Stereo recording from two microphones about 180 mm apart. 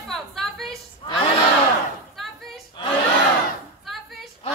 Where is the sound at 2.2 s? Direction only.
Centre (ahead or behind).